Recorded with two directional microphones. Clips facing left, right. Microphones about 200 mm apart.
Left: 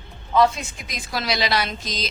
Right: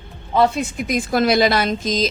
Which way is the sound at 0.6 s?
55° right (ahead or behind).